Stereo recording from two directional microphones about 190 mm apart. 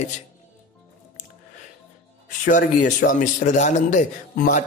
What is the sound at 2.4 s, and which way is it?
A man's voice, 45° left (ahead or behind).